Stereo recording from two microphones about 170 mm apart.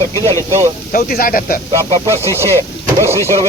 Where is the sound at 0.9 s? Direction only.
60° left (ahead or behind).